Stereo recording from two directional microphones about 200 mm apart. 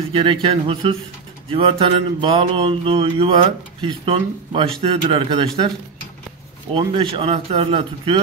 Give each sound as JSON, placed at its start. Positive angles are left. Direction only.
{"t": 0.1, "sound": "mantra", "side_deg": -25}
{"t": 6.7, "sound": "mantra", "side_deg": -25}